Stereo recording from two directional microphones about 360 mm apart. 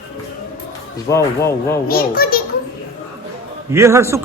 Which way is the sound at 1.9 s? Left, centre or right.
Left.